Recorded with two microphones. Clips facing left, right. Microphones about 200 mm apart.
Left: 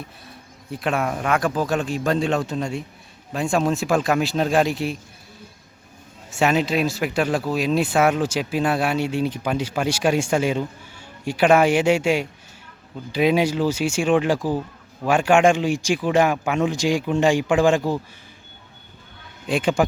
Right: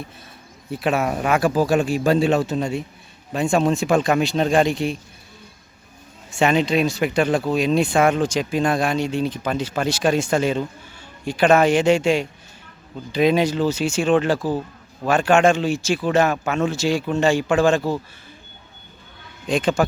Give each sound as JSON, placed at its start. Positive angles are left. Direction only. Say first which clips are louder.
{"t": 0.7, "sound": "speech", "louder": "right 2 dB", "side_deg": -5}
{"t": 6.3, "sound": "speech", "louder": "right 2 dB", "side_deg": 5}
{"t": 19.5, "sound": "speech", "louder": "right 1 dB", "side_deg": 10}